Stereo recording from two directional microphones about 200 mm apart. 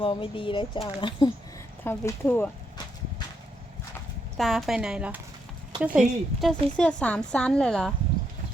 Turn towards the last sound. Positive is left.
turn(degrees=5)  # may be behind; listen again after turning